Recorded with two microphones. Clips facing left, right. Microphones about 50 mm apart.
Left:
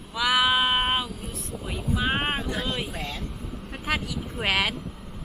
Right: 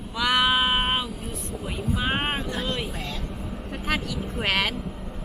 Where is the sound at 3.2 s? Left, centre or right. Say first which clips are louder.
Right 3 dB; centre.